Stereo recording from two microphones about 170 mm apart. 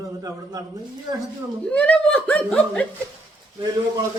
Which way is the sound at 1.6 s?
10° left (ahead or behind).